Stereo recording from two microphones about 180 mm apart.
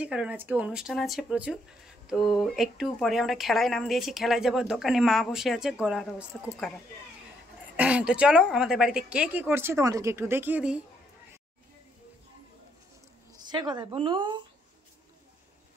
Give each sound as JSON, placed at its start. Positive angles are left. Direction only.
{"t": 0.0, "sound": "speech", "side_deg": -5}
{"t": 7.7, "sound": "a woman's voice", "side_deg": -5}
{"t": 13.5, "sound": "speech", "side_deg": -25}